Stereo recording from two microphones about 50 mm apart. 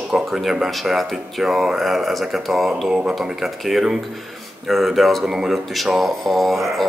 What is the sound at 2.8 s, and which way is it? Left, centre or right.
Speech, centre.